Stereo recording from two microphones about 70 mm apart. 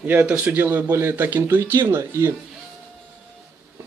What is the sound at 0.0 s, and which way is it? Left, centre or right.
Speech, right.